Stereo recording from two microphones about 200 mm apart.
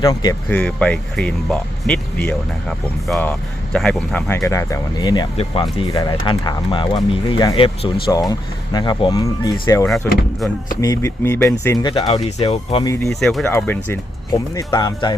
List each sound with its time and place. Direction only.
0.0 s speech: 20° left (ahead or behind)
0.4 s speech: 5° left (ahead or behind); by 12.8 s 30° left (ahead or behind)
13.1 s speech: centre (ahead or behind); by 15.1 s 20° left (ahead or behind)